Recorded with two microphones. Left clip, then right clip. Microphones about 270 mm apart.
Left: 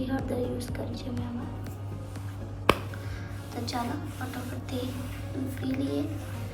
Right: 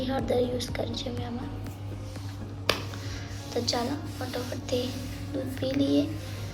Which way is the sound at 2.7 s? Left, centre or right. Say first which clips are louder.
Left 3 dB; left.